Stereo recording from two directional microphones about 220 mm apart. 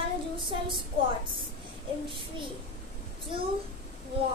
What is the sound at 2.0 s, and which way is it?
Speech, 25° right (ahead or behind).